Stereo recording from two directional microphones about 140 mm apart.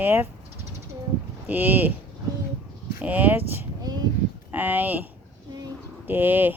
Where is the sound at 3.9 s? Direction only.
30° right (ahead or behind).